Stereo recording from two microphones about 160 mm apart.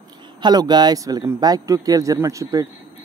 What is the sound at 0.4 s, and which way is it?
Speech, 25° right (ahead or behind).